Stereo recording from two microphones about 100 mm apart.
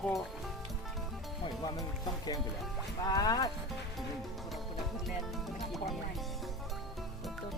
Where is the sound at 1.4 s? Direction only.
45° left (ahead or behind).